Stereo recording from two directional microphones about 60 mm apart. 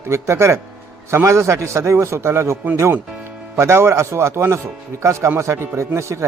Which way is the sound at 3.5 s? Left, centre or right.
Right.